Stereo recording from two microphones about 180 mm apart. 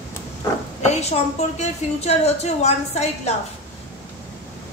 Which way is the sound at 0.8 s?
40° left (ahead or behind).